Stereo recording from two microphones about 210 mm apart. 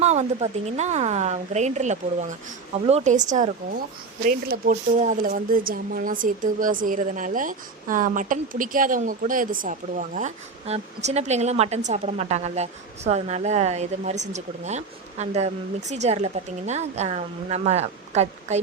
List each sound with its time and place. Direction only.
0.0 s speech: 30° right (ahead or behind)